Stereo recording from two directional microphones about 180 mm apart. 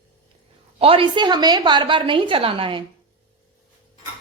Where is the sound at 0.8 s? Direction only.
30° right (ahead or behind).